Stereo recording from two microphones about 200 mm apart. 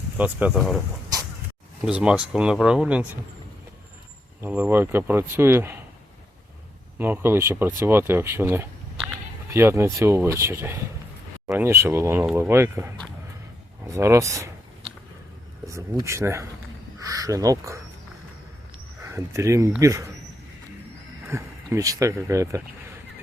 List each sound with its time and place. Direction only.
0.2 s speech: 5° right (ahead or behind)
1.8 s speech: 5° right (ahead or behind)
4.4 s speech: 10° right (ahead or behind)
7.0 s speech: 10° right (ahead or behind)
15.6 s speech: 15° right (ahead or behind)
19.0 s speech: 15° right (ahead or behind)
21.2 s speech: 15° right (ahead or behind)